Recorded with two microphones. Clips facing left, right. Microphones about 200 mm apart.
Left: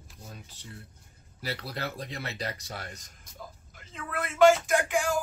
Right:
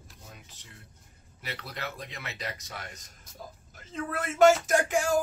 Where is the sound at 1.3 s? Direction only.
35° left (ahead or behind).